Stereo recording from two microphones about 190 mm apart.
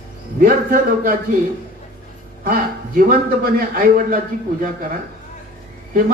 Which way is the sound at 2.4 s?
50° right (ahead or behind).